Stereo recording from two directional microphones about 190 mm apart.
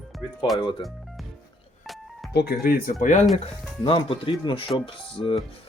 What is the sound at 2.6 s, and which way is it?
Speech, 45° left (ahead or behind).